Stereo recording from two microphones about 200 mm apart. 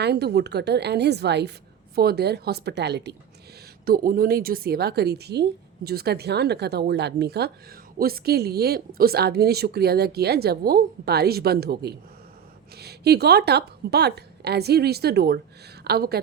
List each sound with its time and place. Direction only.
0.0 s a woman's voice: 55° right (ahead or behind)
3.8 s a woman's voice: 45° right (ahead or behind)